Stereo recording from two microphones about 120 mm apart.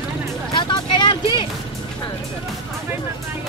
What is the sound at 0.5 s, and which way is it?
Vehicle, 40° left (ahead or behind).